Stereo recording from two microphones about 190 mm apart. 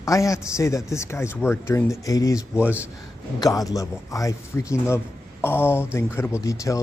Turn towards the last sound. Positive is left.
turn(degrees=15)  # may be behind; listen again after turning